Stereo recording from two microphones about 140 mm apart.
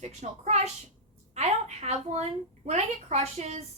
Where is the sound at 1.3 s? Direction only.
50° right (ahead or behind).